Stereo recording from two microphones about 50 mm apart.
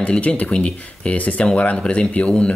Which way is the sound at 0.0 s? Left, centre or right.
Left.